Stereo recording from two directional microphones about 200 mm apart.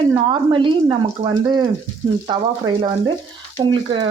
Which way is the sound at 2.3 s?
20° right (ahead or behind).